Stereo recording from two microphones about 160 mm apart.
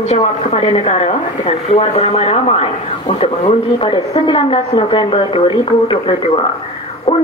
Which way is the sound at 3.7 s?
30° left (ahead or behind).